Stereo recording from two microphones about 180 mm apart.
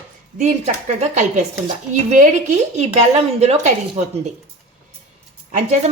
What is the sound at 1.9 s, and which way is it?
A woman's voice, 45° right (ahead or behind).